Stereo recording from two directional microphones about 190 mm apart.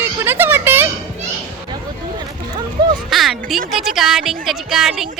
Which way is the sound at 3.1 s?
Centre (ahead or behind).